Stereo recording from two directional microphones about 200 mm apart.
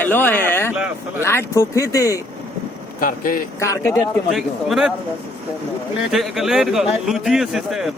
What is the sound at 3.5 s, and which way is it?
Speech, 15° left (ahead or behind).